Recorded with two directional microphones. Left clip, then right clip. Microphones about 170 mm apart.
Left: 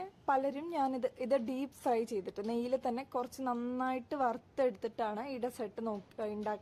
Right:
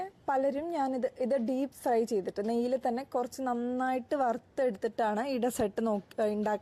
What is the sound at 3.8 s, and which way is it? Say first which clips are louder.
A woman's voice: right 4 dB; 25° right (ahead or behind).